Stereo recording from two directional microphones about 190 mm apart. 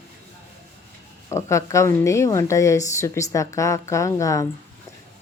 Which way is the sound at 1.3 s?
15° left (ahead or behind).